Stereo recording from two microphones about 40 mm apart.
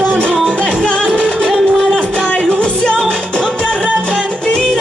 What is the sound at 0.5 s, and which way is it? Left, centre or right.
Music, left.